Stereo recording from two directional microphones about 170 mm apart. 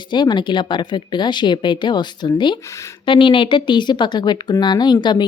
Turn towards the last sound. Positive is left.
turn(degrees=25)  # may be behind; listen again after turning